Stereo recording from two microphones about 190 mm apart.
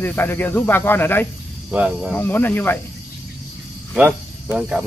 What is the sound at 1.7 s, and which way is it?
Speech, 5° right (ahead or behind).